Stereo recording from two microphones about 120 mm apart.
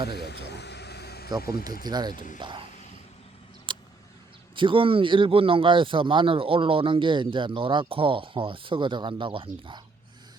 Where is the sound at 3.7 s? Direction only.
40° right (ahead or behind).